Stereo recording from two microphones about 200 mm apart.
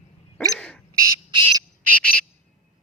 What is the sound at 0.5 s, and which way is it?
Bird, 5° left (ahead or behind).